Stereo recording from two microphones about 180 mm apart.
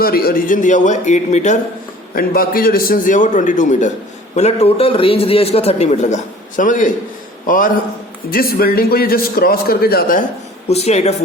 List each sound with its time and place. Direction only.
0.0 s a man's voice: 55° left (ahead or behind)
2.1 s a man's voice: 55° left (ahead or behind)
10.7 s a man's voice: 35° left (ahead or behind)